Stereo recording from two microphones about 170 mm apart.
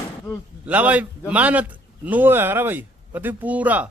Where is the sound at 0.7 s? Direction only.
10° right (ahead or behind).